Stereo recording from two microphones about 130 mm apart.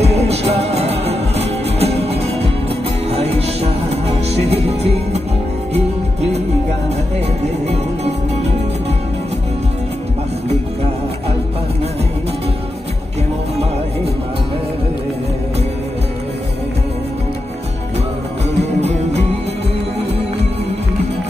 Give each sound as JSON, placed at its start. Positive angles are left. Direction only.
{"t": 0.0, "sound": "music", "side_deg": -55}
{"t": 7.6, "sound": "music", "side_deg": -55}
{"t": 18.8, "sound": "music", "side_deg": -60}